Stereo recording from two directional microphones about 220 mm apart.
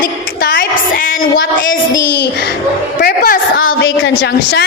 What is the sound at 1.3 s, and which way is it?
A woman's voice, 55° left (ahead or behind).